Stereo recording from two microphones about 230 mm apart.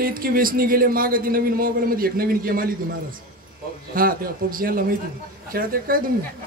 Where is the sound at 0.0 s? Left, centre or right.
Right.